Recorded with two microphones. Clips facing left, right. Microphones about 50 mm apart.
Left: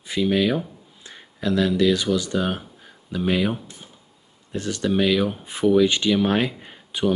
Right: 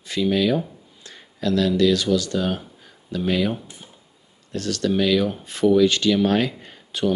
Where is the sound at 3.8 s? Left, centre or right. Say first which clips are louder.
Even; centre.